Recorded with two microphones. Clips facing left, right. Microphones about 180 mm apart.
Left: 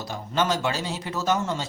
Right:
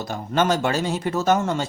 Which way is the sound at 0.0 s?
55° right (ahead or behind).